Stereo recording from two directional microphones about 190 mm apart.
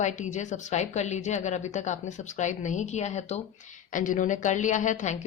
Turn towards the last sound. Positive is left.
turn(degrees=40)  # may be behind; listen again after turning